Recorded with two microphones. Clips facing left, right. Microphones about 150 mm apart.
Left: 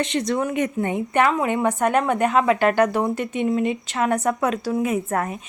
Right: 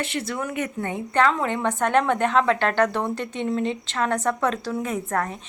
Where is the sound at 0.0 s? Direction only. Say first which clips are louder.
Left 6 dB; 20° left (ahead or behind).